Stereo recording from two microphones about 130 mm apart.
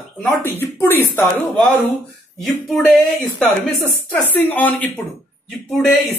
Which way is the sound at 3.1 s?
15° left (ahead or behind).